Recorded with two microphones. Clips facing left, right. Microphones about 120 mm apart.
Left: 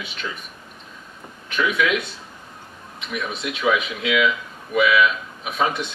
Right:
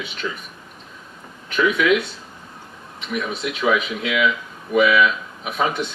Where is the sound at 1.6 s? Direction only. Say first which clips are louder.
Right 4 dB; 40° right (ahead or behind).